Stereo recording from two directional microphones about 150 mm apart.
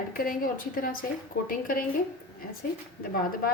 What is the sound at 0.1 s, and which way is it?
A woman's voice, 70° left (ahead or behind).